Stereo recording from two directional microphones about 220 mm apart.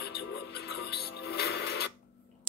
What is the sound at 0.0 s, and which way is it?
Music, 45° left (ahead or behind).